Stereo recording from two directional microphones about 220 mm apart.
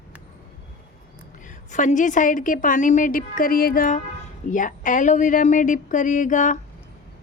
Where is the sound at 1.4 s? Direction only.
35° left (ahead or behind).